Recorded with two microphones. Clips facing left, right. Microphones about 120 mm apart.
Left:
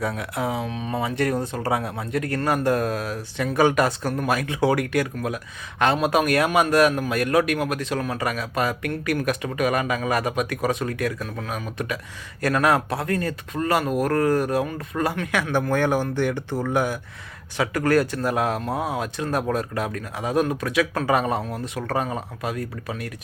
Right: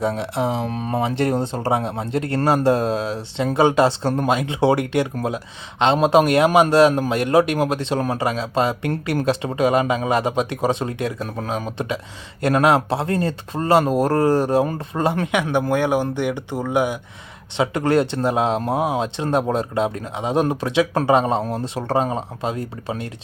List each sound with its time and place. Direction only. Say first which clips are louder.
0.0 s speech: right 5 dB; 25° right (ahead or behind)
0.7 s speech: right 4 dB; 45° right (ahead or behind)
0.9 s speech: right 3 dB; 25° right (ahead or behind)
15.7 s speech: right 1 dB; 15° right (ahead or behind)